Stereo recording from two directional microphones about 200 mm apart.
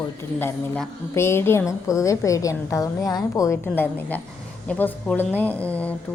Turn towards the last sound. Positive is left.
turn(degrees=5)  # may be behind; listen again after turning